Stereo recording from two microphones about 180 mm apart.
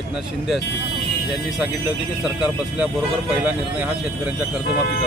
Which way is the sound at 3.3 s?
10° right (ahead or behind).